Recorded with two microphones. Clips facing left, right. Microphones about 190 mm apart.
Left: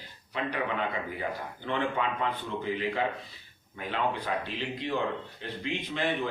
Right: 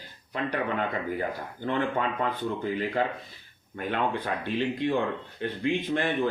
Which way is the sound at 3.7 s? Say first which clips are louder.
Right 3 dB; 55° right (ahead or behind).